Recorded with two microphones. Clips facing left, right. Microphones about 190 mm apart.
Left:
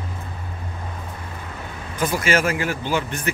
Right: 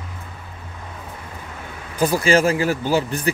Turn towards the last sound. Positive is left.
turn(degrees=-35)  # may be behind; listen again after turning